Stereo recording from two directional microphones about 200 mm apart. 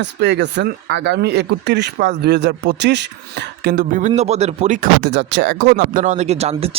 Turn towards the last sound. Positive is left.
turn(degrees=-30)  # may be behind; listen again after turning